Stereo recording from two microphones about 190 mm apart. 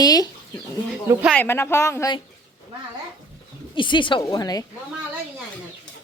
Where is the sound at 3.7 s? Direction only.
25° left (ahead or behind).